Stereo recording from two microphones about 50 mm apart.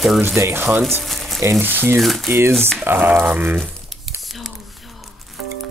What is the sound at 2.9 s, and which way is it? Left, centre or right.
Speech, right.